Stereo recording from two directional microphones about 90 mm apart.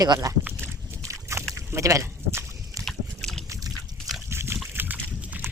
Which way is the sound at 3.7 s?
Centre (ahead or behind).